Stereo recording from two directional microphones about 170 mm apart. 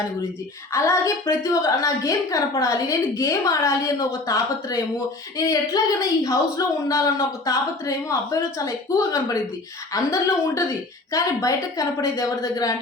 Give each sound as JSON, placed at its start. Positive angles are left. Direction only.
{"t": 0.7, "sound": "a woman's voice", "side_deg": 15}
{"t": 9.9, "sound": "a woman's voice", "side_deg": 20}